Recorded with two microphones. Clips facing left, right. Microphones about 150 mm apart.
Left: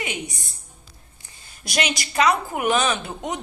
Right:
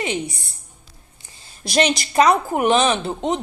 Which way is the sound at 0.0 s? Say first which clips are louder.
Right 6 dB; 30° right (ahead or behind).